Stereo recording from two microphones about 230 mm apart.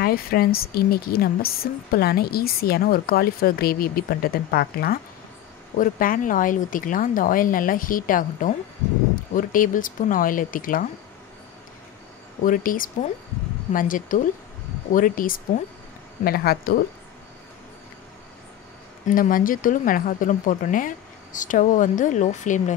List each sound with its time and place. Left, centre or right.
0.0 s a woman's voice: left
12.4 s a woman's voice: left
19.0 s a woman's voice: left